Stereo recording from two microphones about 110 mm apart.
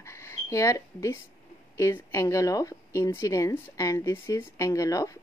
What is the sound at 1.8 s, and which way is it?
A woman's voice, 25° left (ahead or behind).